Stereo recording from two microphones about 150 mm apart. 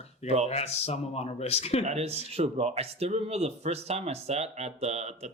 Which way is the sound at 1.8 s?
45° right (ahead or behind).